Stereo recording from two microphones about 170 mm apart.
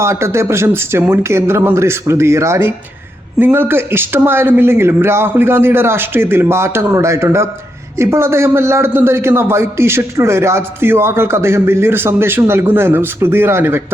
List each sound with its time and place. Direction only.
0.0 s a man's voice: 15° right (ahead or behind)